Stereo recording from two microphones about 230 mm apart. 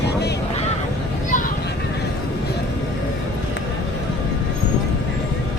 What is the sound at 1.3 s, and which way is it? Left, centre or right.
Vehicle, left.